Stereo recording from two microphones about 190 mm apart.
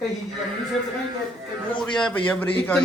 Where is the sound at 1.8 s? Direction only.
5° left (ahead or behind).